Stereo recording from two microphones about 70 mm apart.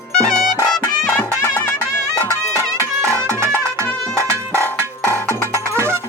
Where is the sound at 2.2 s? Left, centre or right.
Right.